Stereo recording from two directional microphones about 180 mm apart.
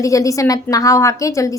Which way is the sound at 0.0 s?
15° left (ahead or behind).